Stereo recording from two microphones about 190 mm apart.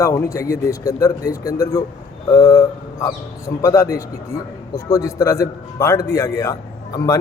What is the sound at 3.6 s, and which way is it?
A man's voice, 15° left (ahead or behind).